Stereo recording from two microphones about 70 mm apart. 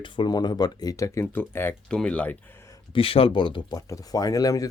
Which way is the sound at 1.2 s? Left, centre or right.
Left.